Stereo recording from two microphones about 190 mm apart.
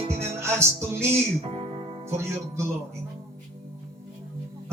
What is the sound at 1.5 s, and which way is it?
Music, 30° right (ahead or behind).